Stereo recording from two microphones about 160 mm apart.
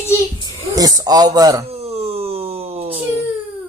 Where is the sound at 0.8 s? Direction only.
20° right (ahead or behind).